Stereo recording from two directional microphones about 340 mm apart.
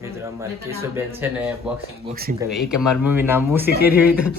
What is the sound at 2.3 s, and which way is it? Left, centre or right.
Speech, centre.